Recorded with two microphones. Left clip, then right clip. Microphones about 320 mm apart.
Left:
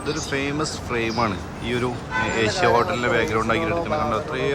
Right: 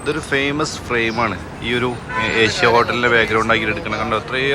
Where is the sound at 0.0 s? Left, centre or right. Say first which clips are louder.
Right 6 dB; centre.